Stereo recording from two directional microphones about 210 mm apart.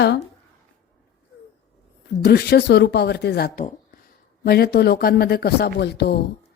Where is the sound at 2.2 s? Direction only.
45° left (ahead or behind).